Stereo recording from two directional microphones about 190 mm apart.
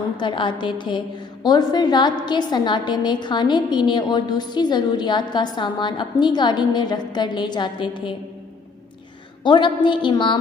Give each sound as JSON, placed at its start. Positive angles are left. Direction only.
{"t": 0.2, "sound": "a woman's voice", "side_deg": 25}
{"t": 9.4, "sound": "a woman's voice", "side_deg": 25}